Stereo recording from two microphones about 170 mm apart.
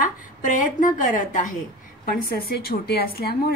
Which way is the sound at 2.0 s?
60° left (ahead or behind).